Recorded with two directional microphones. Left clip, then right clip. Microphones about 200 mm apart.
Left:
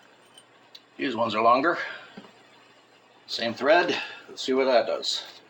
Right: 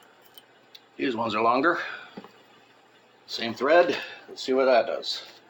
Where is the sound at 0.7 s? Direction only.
10° right (ahead or behind).